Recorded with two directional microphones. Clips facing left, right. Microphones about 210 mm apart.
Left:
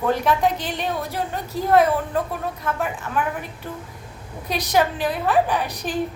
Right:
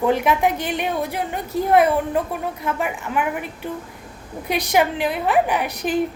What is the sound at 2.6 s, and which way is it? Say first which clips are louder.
Speech: right 1 dB; 10° right (ahead or behind).